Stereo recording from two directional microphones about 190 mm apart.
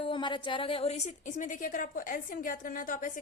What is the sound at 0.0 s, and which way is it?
A woman's voice, 25° left (ahead or behind).